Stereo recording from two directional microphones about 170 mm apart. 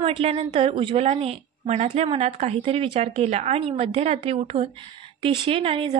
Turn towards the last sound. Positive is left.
turn(degrees=-30)  # may be behind; listen again after turning